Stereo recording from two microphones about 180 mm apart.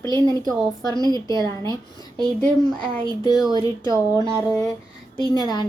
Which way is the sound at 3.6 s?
25° right (ahead or behind).